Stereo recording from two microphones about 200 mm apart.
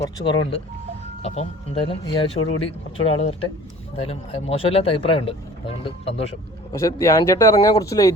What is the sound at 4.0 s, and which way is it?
Speech, 30° left (ahead or behind).